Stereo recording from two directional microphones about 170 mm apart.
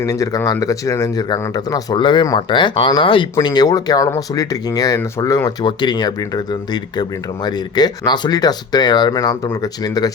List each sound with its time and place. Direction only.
0.0 s speech: 20° left (ahead or behind)